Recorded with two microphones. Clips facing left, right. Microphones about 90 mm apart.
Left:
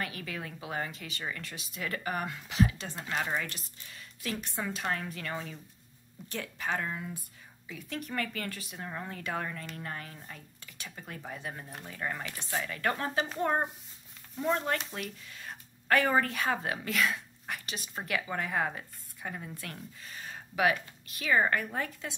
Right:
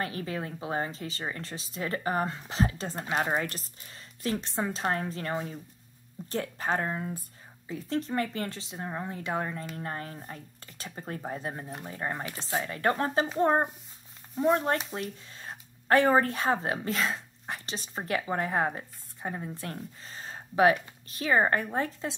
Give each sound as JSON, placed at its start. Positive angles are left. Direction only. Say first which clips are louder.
{"t": 0.0, "sound": "speech", "louder": "right 5 dB", "side_deg": -35}